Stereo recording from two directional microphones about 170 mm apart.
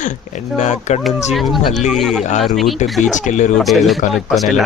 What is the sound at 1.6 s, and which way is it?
Speech, 45° left (ahead or behind).